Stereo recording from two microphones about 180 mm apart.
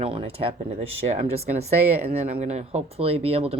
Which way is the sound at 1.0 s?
45° right (ahead or behind).